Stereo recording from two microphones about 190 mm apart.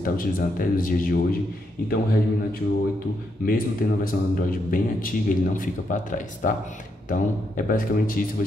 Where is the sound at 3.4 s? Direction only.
50° left (ahead or behind).